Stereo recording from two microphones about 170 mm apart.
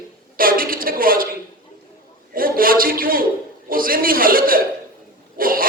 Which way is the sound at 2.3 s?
60° right (ahead or behind).